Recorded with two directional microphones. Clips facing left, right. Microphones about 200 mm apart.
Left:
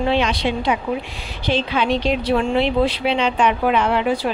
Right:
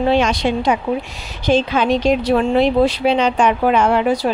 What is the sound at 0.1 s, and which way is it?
Speech, 45° right (ahead or behind).